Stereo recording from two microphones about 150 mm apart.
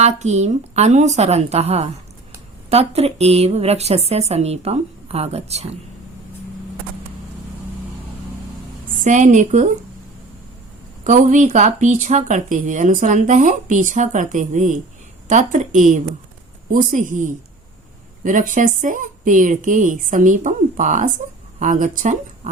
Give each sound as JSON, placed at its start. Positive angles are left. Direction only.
{"t": 0.0, "sound": "a woman's voice", "side_deg": -50}
{"t": 9.0, "sound": "speech", "side_deg": -55}
{"t": 11.0, "sound": "a woman's voice", "side_deg": -55}